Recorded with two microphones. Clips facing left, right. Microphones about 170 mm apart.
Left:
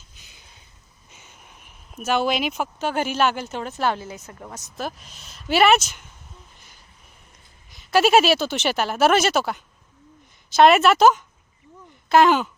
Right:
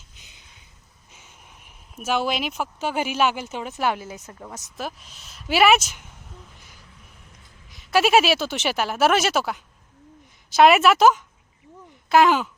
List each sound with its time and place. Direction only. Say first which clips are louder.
0.2 s a sound: left 1 dB; 20° right (ahead or behind)
1.1 s speech: left 1 dB; centre (ahead or behind); by 4.4 s 15° right (ahead or behind)
4.8 s speech: left 2 dB; centre (ahead or behind)
7.7 s speech: left 1 dB; centre (ahead or behind)